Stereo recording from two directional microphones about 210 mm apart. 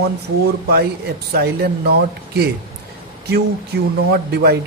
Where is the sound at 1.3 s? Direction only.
50° right (ahead or behind).